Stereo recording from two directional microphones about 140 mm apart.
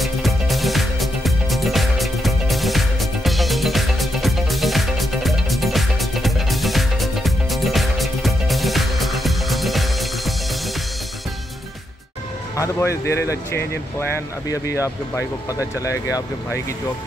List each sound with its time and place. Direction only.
0.0 s music: centre (ahead or behind)
12.5 s speech: 20° left (ahead or behind)